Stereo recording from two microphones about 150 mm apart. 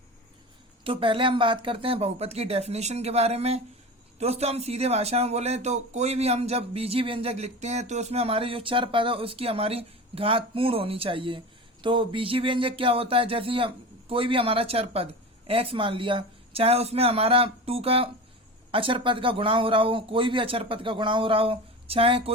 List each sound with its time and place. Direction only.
0.9 s speech: 35° right (ahead or behind)